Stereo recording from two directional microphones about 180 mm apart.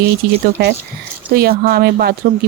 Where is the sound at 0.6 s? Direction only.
65° right (ahead or behind).